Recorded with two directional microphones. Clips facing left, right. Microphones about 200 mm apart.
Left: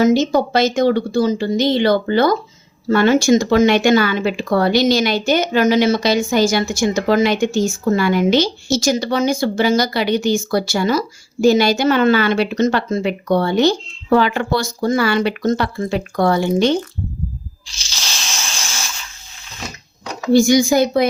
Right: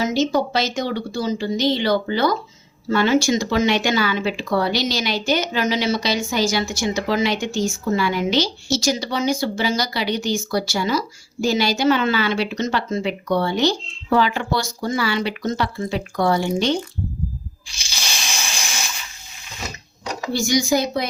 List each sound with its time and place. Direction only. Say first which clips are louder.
0.0 s speech: left 6 dB; 50° left (ahead or behind)
17.7 s a sound: even; 15° right (ahead or behind)
20.3 s speech: left 8 dB; 55° left (ahead or behind)